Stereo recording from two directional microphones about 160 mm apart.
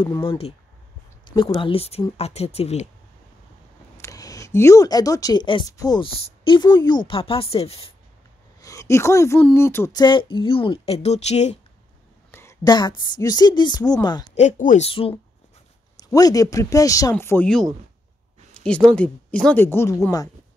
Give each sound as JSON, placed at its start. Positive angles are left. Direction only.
{"t": 0.0, "sound": "speech", "side_deg": 30}
{"t": 4.0, "sound": "speech", "side_deg": 20}
{"t": 8.5, "sound": "speech", "side_deg": 20}
{"t": 10.0, "sound": "speech", "side_deg": 30}
{"t": 12.3, "sound": "speech", "side_deg": 15}
{"t": 14.3, "sound": "speech", "side_deg": 50}
{"t": 14.9, "sound": "speech", "side_deg": 35}
{"t": 16.0, "sound": "speech", "side_deg": 25}
{"t": 18.5, "sound": "speech", "side_deg": 5}